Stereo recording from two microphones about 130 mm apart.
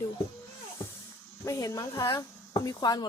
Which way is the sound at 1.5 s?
25° left (ahead or behind).